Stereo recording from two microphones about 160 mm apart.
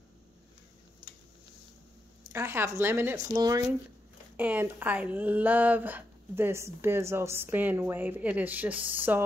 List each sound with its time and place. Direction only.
2.3 s speech: 15° right (ahead or behind)
4.4 s speech: 10° right (ahead or behind)